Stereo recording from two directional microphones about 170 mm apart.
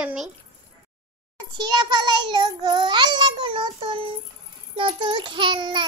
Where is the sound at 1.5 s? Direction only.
25° right (ahead or behind).